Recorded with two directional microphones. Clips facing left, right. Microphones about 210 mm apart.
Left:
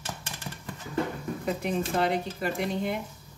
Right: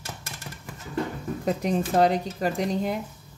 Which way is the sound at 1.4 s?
40° right (ahead or behind).